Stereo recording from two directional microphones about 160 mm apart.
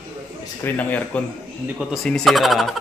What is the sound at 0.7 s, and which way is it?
Speech, 10° left (ahead or behind).